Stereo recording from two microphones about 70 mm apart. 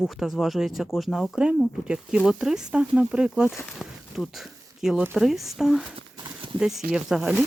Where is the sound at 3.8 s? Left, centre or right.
Centre.